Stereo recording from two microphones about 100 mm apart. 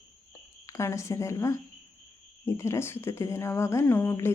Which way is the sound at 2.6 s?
25° left (ahead or behind).